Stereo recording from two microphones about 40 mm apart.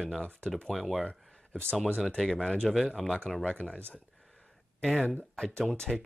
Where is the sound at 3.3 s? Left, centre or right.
Centre.